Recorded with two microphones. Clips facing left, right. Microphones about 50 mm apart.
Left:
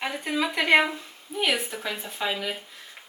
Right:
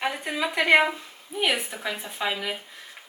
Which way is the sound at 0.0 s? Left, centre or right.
Centre.